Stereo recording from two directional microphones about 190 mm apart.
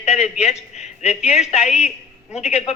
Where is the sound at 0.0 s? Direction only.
35° left (ahead or behind).